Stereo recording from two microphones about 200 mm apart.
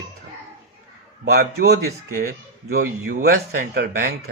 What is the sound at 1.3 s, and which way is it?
A man's voice, 50° right (ahead or behind).